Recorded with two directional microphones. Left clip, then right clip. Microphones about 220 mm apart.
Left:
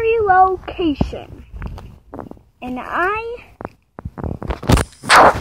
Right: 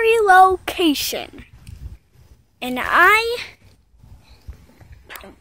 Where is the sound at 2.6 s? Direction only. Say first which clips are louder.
Right 6 dB; 25° right (ahead or behind).